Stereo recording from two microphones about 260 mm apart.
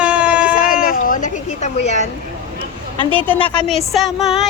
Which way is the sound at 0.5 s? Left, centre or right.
Left.